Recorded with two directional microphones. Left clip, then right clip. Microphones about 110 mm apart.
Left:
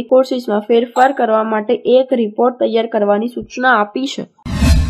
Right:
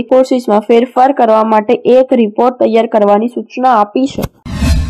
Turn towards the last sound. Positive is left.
turn(degrees=-25)  # may be behind; listen again after turning